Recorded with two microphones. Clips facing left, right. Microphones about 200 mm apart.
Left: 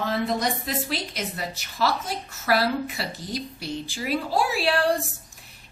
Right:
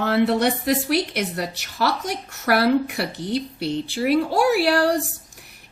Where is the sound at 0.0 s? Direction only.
70° right (ahead or behind).